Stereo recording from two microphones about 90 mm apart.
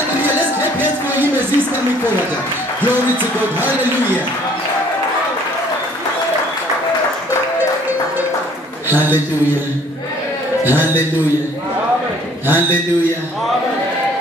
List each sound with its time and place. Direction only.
0.2 s music: 20° right (ahead or behind)
3.5 s a man's voice: 20° right (ahead or behind)
8.8 s a man's voice: 20° right (ahead or behind)
10.6 s a man's voice: 25° right (ahead or behind)
12.4 s a man's voice: 20° right (ahead or behind)